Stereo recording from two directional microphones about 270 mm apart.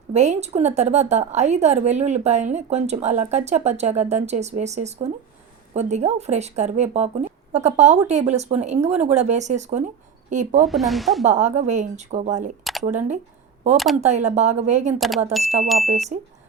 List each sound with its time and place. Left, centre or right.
0.1 s a woman's voice: right
10.7 s speech: centre
11.2 s a woman's voice: right
13.7 s speech: centre
14.0 s a woman's voice: right
14.9 s speech: centre